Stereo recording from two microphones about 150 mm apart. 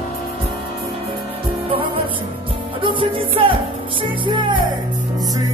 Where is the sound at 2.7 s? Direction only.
35° right (ahead or behind).